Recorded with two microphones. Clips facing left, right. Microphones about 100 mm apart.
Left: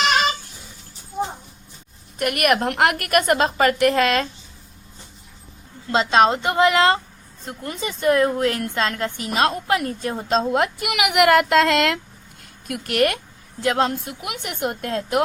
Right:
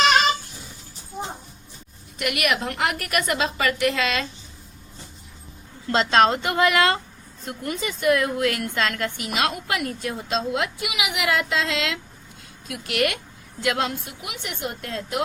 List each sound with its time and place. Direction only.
2.1 s a woman's voice: 45° left (ahead or behind)
5.9 s a woman's voice: 20° left (ahead or behind); by 15.2 s 50° left (ahead or behind)